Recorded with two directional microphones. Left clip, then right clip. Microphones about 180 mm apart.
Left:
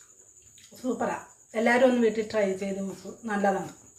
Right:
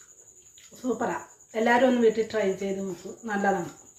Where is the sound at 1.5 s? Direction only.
20° left (ahead or behind).